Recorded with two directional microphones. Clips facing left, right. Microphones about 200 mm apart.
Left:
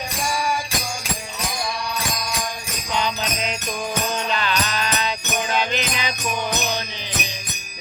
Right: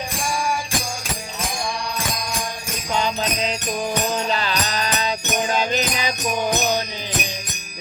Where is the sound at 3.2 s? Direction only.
35° right (ahead or behind).